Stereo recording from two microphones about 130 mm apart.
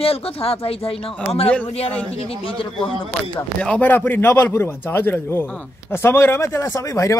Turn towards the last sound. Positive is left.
turn(degrees=25)  # may be behind; listen again after turning